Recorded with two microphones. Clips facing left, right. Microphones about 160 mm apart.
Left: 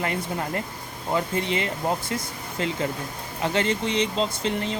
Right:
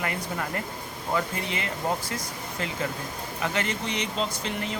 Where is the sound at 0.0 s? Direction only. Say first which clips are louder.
Left 3 dB; 25° left (ahead or behind).